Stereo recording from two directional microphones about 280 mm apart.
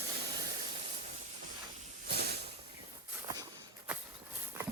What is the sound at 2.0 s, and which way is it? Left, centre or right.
Hiss, right.